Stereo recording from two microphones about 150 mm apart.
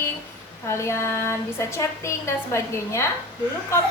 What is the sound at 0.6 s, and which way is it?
A woman's voice, 20° left (ahead or behind).